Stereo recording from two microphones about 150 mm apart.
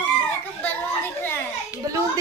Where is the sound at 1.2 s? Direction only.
15° left (ahead or behind).